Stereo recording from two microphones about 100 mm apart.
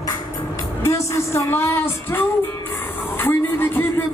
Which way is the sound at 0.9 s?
30° left (ahead or behind).